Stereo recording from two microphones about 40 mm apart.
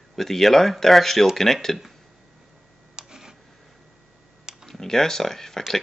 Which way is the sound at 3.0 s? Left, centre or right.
Centre.